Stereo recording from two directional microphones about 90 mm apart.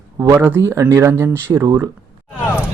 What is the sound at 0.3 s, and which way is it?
Speech, 25° right (ahead or behind).